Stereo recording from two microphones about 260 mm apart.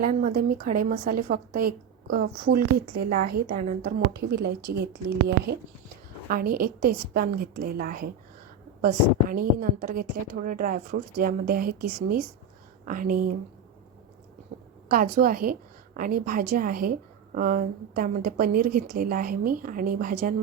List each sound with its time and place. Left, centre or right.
0.0 s a woman's voice: right
14.8 s a woman's voice: right